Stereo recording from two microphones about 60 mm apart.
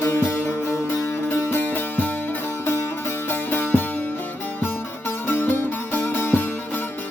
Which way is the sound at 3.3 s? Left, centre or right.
Left.